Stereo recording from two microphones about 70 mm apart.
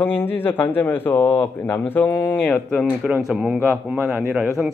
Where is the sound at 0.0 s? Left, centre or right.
Left.